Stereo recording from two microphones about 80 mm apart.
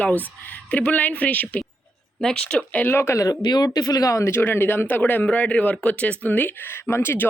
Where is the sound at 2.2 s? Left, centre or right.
Centre; by 3.4 s left.